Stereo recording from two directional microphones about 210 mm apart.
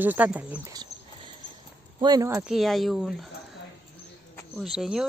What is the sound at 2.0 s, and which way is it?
Speech, 20° right (ahead or behind).